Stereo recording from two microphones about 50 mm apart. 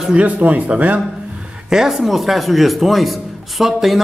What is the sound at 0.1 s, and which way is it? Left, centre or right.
Speech, right.